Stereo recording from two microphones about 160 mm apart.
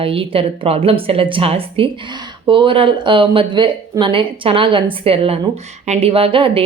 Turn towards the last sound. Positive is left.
turn(degrees=-35)  # may be behind; listen again after turning